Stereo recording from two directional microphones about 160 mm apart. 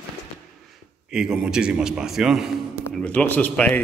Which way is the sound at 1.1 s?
5° right (ahead or behind).